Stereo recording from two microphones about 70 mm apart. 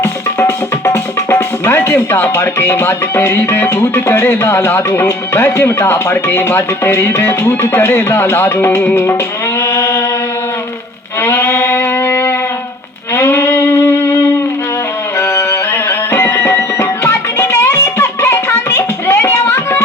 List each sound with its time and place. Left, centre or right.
0.3 s music: left
11.2 s music: left
15.3 s music: left
19.0 s a sound: left